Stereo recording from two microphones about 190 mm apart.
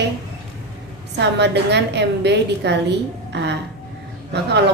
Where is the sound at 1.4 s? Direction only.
65° right (ahead or behind).